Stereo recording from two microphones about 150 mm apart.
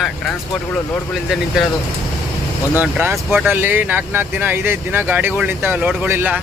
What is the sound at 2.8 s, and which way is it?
Speech, 15° right (ahead or behind).